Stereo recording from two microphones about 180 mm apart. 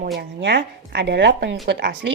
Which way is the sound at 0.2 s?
70° right (ahead or behind).